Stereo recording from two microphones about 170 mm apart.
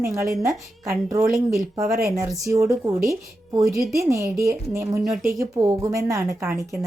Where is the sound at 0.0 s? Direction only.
20° right (ahead or behind).